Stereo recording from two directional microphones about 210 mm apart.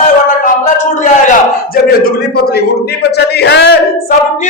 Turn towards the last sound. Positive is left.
turn(degrees=50)  # may be behind; listen again after turning